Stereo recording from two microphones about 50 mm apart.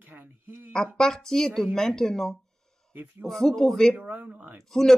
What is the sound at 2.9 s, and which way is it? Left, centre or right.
Speech, right.